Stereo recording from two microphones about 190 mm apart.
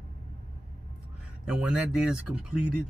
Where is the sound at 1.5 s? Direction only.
5° right (ahead or behind).